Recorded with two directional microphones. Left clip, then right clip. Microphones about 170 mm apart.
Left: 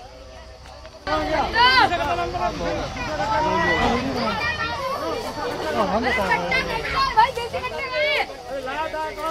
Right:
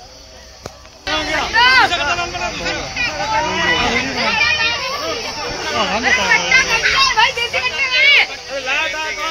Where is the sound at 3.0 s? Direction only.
20° left (ahead or behind).